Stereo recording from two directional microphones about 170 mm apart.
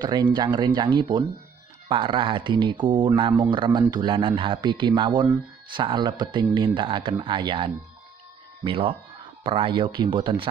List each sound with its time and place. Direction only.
0.0 s speech: 25° right (ahead or behind)